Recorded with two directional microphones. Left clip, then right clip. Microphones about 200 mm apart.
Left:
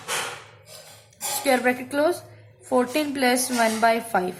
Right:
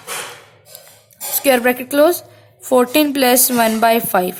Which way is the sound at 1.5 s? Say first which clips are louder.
Right 7 dB; 50° right (ahead or behind).